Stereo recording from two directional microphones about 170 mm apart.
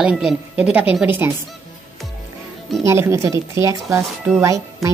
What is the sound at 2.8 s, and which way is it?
Speech, 15° right (ahead or behind).